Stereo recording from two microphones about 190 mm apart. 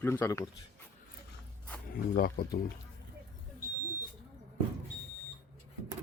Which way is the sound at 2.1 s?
50° left (ahead or behind).